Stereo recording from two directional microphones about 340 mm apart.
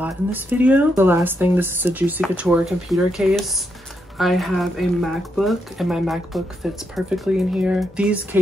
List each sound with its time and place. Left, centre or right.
0.0 s speech: centre